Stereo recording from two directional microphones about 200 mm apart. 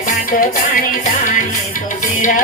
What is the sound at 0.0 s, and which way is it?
Music, 45° left (ahead or behind).